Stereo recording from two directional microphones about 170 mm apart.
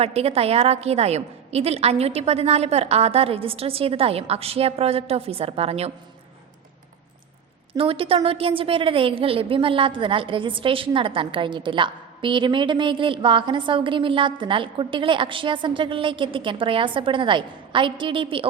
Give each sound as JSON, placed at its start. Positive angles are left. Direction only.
{"t": 0.0, "sound": "a woman's voice", "side_deg": -35}
{"t": 7.8, "sound": "a woman's voice", "side_deg": -30}